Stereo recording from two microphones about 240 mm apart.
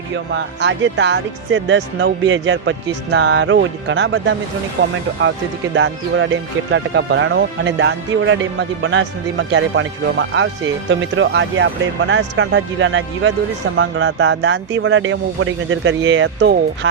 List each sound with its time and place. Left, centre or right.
0.3 s speech: right